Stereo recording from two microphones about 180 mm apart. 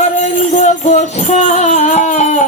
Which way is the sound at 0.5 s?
40° left (ahead or behind).